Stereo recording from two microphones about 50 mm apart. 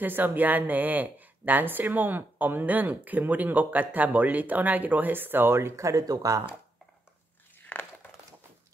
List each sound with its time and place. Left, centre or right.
0.0 s speech: right